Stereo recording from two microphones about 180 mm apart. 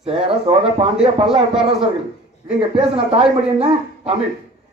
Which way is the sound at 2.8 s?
35° right (ahead or behind).